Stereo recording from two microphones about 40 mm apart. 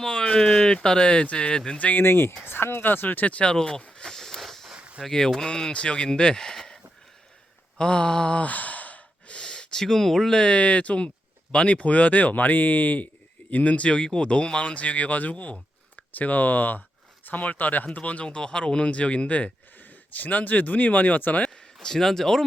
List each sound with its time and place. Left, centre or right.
0.0 s speech: centre
2.0 s speech: left
3.2 s speech: left
3.5 s speech: centre
4.0 s a sound: centre
4.4 s a sound: centre
5.0 s speech: centre
7.8 s speech: left
8.4 s sigh: left
9.3 s speech: centre
10.4 s speech: left
13.5 s speech: left
19.8 s speech: left
21.5 s speech: centre